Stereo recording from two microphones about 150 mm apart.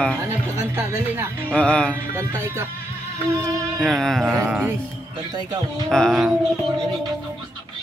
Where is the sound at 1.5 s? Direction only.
10° left (ahead or behind).